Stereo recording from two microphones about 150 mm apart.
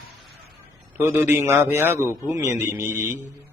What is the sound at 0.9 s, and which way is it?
A man's voice, 15° right (ahead or behind).